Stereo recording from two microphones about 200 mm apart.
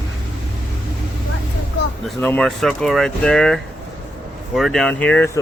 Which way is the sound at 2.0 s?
5° left (ahead or behind).